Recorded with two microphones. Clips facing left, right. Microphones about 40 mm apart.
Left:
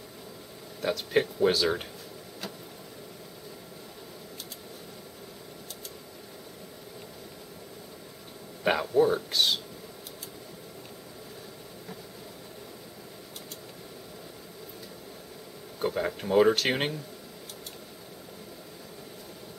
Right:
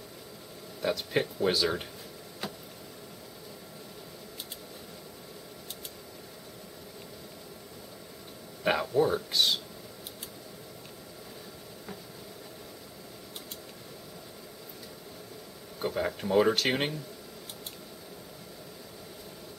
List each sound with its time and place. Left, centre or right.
0.8 s speech: centre
8.6 s speech: centre
15.8 s speech: centre